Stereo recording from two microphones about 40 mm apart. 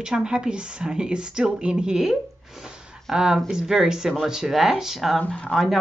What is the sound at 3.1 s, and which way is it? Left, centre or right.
Speech, centre.